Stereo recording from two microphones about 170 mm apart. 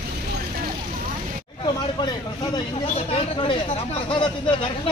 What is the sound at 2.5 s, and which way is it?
Speech, 35° left (ahead or behind).